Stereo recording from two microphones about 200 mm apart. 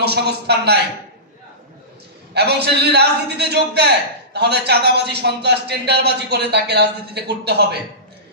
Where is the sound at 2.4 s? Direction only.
55° right (ahead or behind).